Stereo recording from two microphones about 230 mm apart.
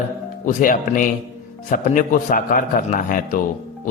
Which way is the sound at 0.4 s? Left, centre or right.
Left.